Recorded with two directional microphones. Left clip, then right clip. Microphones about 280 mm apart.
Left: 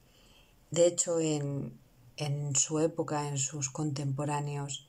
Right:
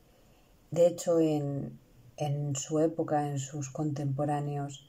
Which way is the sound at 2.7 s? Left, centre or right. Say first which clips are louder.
Right 5 dB; centre.